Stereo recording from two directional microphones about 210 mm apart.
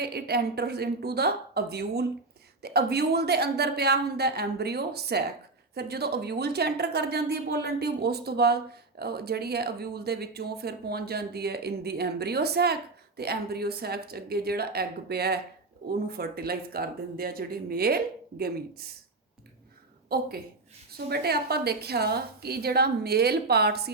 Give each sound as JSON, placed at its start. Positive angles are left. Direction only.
{"t": 0.0, "sound": "speech", "side_deg": -50}
{"t": 20.1, "sound": "a woman's voice", "side_deg": -45}